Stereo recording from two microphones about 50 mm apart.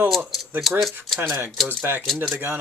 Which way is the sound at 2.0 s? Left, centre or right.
Centre.